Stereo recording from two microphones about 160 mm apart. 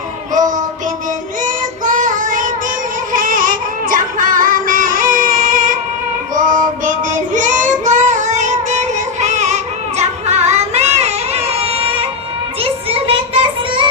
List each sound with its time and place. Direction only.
0.3 s child singing: 50° right (ahead or behind); by 13.8 s 35° right (ahead or behind)